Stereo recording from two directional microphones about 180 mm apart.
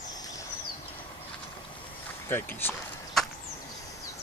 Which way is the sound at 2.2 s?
10° left (ahead or behind).